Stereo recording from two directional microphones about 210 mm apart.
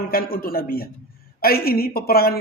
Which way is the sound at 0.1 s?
45° left (ahead or behind).